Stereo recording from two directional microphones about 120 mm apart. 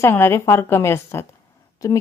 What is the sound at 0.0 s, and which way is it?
A woman's voice, 20° left (ahead or behind).